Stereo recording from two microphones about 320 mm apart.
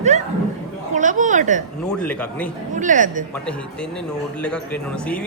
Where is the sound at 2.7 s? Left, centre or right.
Right.